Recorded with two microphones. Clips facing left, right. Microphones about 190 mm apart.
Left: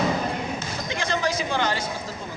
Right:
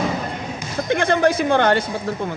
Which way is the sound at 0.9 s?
55° right (ahead or behind).